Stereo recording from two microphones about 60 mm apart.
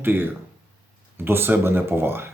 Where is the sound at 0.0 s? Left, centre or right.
Right.